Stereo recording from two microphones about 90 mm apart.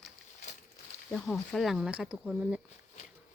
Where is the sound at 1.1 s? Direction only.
10° left (ahead or behind).